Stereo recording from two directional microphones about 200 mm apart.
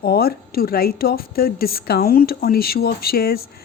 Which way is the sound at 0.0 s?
50° left (ahead or behind).